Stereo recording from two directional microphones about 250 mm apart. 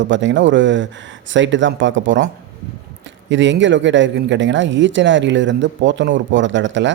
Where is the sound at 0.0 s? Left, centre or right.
Right.